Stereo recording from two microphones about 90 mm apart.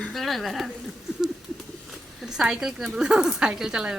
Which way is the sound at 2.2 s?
5° right (ahead or behind).